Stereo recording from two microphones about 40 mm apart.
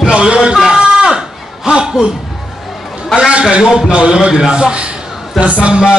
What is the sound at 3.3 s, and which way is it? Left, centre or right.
A man's voice, right.